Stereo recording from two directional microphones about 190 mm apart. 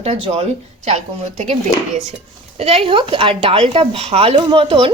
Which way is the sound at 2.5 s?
30° right (ahead or behind).